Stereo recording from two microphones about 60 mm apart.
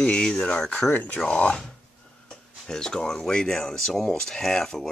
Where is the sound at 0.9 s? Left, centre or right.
Left.